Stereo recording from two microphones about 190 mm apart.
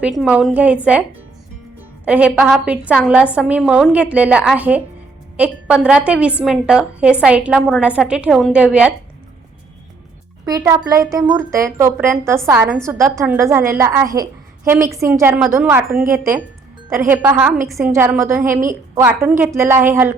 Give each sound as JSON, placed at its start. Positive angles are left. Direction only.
{"t": 0.0, "sound": "a woman's voice", "side_deg": -5}
{"t": 2.0, "sound": "a woman's voice", "side_deg": -5}
{"t": 10.4, "sound": "a woman's voice", "side_deg": -20}
{"t": 17.9, "sound": "a woman's voice", "side_deg": -15}